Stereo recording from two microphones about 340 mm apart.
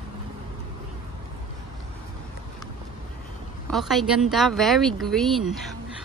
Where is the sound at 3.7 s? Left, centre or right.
Centre.